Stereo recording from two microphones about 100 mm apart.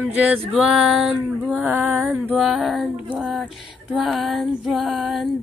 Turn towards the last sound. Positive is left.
turn(degrees=0)  # may be behind; listen again after turning